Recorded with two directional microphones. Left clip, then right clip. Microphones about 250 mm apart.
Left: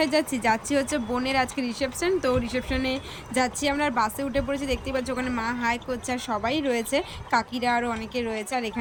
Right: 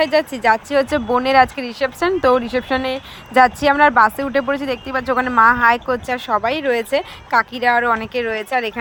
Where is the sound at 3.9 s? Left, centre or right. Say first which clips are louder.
Right 11 dB; right.